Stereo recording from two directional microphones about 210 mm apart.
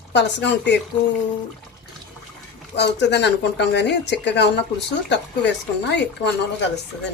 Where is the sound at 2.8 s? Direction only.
55° left (ahead or behind).